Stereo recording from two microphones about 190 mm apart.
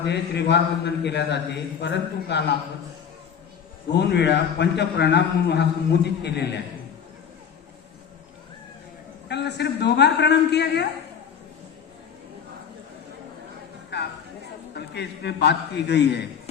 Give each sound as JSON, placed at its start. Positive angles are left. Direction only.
{"t": 0.1, "sound": "a man's voice", "side_deg": 60}
{"t": 3.9, "sound": "a man's voice", "side_deg": 60}
{"t": 9.3, "sound": "a man's voice", "side_deg": 65}
{"t": 13.9, "sound": "a sound", "side_deg": 65}
{"t": 14.8, "sound": "a man's voice", "side_deg": 60}